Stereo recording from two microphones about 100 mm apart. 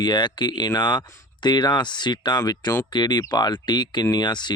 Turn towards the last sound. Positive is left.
turn(degrees=50)  # may be behind; listen again after turning